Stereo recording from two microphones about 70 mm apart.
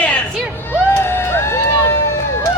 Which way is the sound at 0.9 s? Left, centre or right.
Left.